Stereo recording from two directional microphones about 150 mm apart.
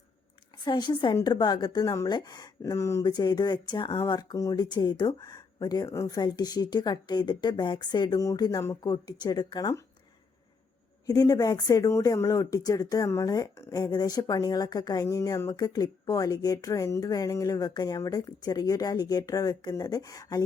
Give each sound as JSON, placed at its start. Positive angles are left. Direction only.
{"t": 0.6, "sound": "speech", "side_deg": 30}
{"t": 11.0, "sound": "speech", "side_deg": 25}